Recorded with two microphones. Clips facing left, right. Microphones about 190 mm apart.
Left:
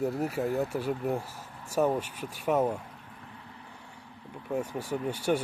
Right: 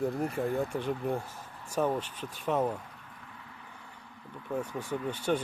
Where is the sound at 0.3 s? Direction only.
5° left (ahead or behind).